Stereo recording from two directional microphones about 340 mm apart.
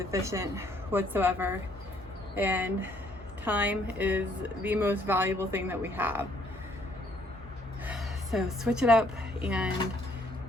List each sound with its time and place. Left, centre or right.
0.0 s speech: centre
7.9 s a woman's voice: centre